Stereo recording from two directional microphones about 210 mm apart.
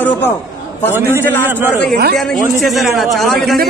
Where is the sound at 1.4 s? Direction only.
10° right (ahead or behind).